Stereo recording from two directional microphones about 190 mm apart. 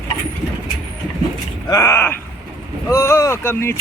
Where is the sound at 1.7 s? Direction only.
15° left (ahead or behind).